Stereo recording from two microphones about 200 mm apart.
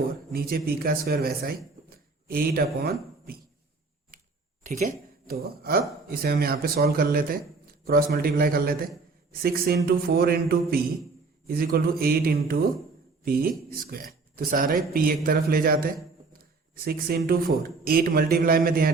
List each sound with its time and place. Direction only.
0.3 s a man's voice: 50° right (ahead or behind)
4.6 s a man's voice: 40° right (ahead or behind)